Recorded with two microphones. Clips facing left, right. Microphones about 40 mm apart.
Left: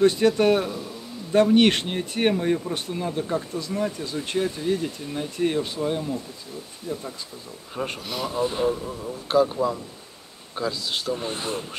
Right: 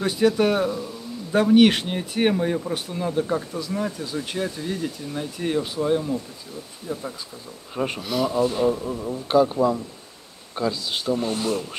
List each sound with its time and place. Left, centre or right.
0.0 s speech: centre
6.9 s speech: centre
7.7 s speech: centre
8.4 s a man's voice: centre
8.6 s speech: centre
11.2 s speech: left